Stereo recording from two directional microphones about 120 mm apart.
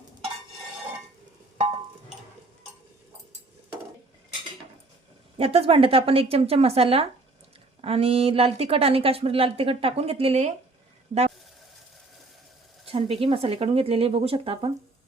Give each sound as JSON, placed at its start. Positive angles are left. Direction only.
{"t": 5.4, "sound": "speech", "side_deg": -55}
{"t": 12.9, "sound": "speech", "side_deg": -50}